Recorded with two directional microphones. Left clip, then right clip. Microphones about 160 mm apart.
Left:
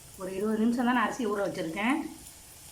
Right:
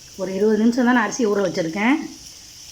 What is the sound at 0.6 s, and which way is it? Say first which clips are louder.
A woman's voice: right 9 dB; 50° right (ahead or behind).